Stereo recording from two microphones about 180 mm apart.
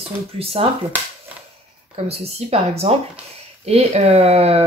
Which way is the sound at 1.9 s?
35° right (ahead or behind).